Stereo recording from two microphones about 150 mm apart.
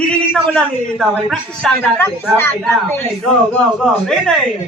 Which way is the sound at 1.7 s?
15° left (ahead or behind).